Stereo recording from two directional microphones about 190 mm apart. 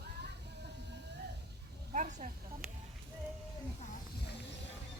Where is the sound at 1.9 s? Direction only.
40° right (ahead or behind).